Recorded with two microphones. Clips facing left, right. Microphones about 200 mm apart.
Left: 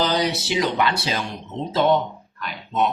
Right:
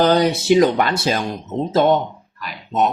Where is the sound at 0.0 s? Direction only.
50° right (ahead or behind).